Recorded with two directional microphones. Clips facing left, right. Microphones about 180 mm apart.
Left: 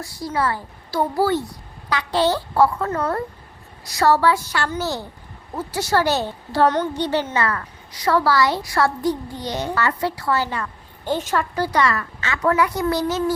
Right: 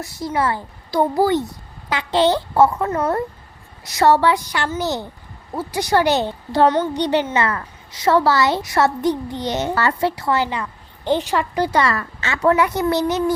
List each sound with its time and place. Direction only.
0.0 s a child's voice: 20° right (ahead or behind)
11.7 s a child's voice: 30° right (ahead or behind)